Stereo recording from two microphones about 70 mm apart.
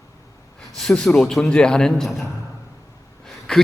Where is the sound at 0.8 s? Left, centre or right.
Centre.